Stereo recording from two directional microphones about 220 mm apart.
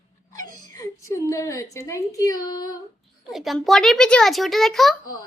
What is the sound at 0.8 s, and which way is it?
Speech, 15° left (ahead or behind).